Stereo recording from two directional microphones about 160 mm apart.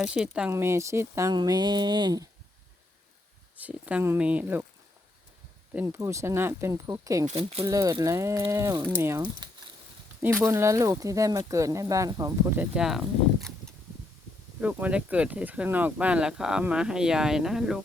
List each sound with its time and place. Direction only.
0.0 s speech: 5° right (ahead or behind)
0.5 s speech: 15° right (ahead or behind)
3.6 s speech: 10° right (ahead or behind)
5.7 s speech: 15° right (ahead or behind)
7.3 s speech: 40° right (ahead or behind)
7.6 s speech: 20° right (ahead or behind)
9.4 s a sound: 30° right (ahead or behind)
10.4 s speech: 15° right (ahead or behind)